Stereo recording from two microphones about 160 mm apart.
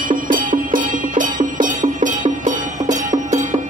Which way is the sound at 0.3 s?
55° right (ahead or behind).